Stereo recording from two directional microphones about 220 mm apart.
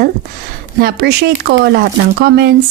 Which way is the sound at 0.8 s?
45° right (ahead or behind).